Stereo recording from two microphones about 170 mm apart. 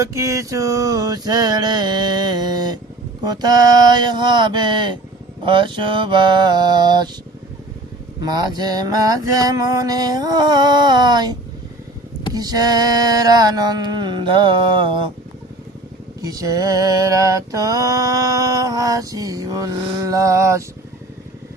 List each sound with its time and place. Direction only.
0.0 s mantra: 15° right (ahead or behind)
8.2 s mantra: 25° right (ahead or behind)
16.2 s mantra: 20° right (ahead or behind)